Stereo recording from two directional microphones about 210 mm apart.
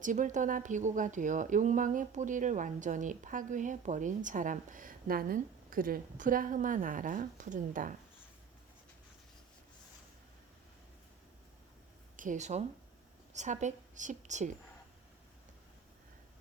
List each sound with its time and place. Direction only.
0.0 s speech: 35° right (ahead or behind)
12.1 s a woman's voice: 40° right (ahead or behind)